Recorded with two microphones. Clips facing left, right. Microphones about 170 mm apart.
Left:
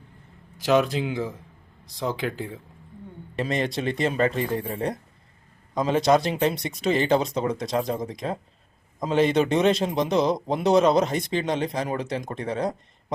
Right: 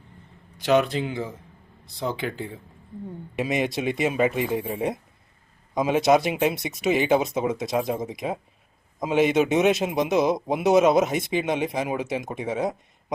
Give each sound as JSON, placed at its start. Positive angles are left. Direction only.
{"t": 0.6, "sound": "speech", "side_deg": 0}
{"t": 5.7, "sound": "speech", "side_deg": -5}